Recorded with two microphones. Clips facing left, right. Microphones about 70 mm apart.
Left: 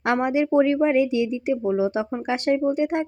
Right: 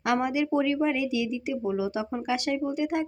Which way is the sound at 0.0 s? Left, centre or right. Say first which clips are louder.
Left 4 dB; left.